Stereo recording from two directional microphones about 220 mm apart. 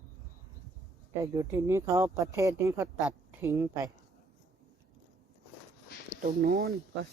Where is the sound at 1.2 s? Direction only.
15° right (ahead or behind).